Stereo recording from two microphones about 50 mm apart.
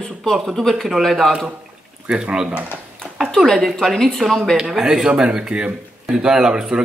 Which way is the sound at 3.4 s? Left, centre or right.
Centre.